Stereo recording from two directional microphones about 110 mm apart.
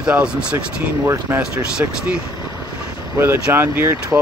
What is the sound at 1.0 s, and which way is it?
Speech, 25° right (ahead or behind).